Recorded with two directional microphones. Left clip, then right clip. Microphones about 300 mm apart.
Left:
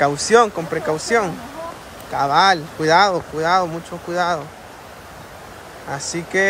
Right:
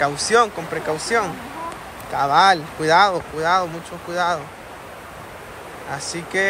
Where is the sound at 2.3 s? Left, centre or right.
Centre.